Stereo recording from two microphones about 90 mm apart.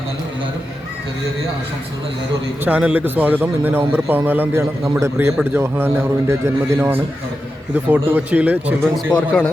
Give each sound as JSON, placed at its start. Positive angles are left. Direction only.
{"t": 2.6, "sound": "a man's voice", "side_deg": -15}